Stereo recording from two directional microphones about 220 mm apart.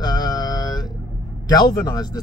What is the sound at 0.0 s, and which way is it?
Mantra, 20° left (ahead or behind).